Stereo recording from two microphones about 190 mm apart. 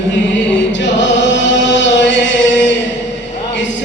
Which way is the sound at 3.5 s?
70° left (ahead or behind).